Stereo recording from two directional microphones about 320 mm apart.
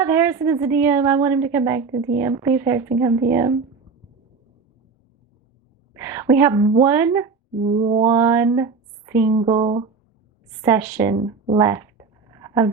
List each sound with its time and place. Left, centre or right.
0.0 s a woman's voice: centre
5.9 s speech: centre
8.1 s a sound: centre
9.3 s a woman's voice: centre
10.6 s a woman's voice: centre
11.2 s a sound: centre